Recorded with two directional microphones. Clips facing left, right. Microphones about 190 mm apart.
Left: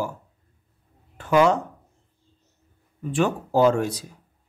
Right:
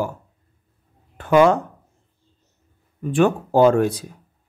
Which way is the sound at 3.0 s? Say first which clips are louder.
Right 5 dB; 55° right (ahead or behind).